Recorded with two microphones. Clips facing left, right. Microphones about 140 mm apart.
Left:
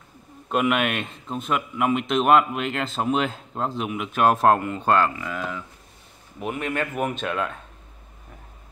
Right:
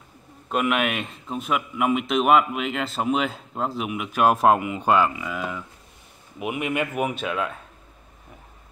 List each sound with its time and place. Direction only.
0.5 s a man's voice: centre (ahead or behind)